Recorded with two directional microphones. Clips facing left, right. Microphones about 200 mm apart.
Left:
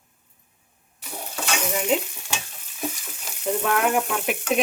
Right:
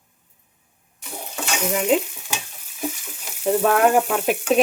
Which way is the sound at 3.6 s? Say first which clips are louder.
Right 5 dB; 40° right (ahead or behind).